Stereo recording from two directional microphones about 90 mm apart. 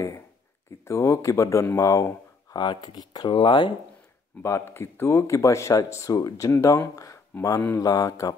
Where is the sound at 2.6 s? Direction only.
60° left (ahead or behind).